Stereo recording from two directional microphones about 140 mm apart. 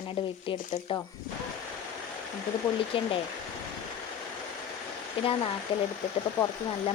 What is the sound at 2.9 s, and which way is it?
Speech, 40° left (ahead or behind).